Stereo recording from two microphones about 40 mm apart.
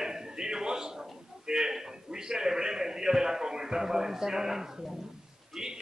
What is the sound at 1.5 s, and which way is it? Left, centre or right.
A man's voice, centre.